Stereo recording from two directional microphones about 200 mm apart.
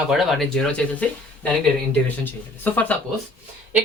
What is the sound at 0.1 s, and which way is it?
Speech, centre (ahead or behind).